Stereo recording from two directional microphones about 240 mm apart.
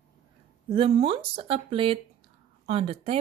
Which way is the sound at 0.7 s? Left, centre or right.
Right.